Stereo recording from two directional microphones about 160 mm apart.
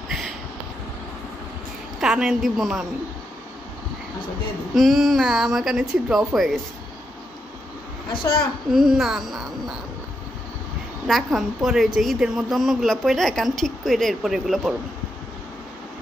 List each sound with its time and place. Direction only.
2.0 s a woman's voice: 5° right (ahead or behind)
4.7 s a woman's voice: centre (ahead or behind)
8.7 s a woman's voice: centre (ahead or behind)
11.1 s a woman's voice: centre (ahead or behind)